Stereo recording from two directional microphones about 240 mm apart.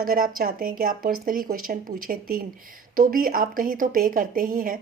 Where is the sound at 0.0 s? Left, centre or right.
Right.